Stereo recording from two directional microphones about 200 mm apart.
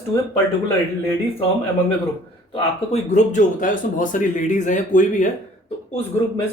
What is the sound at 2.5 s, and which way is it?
Speech, 35° left (ahead or behind).